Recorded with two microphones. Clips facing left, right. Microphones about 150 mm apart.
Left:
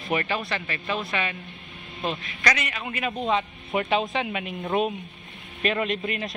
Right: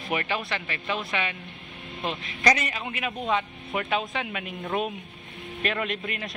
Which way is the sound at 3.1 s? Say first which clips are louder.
Left 2 dB; 20° left (ahead or behind).